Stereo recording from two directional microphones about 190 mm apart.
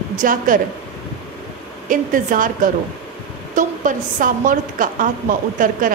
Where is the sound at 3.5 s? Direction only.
45° right (ahead or behind).